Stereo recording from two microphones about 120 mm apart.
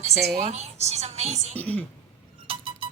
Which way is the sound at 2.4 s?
50° right (ahead or behind).